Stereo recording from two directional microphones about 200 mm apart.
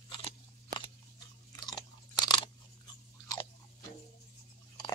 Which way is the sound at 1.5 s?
20° left (ahead or behind).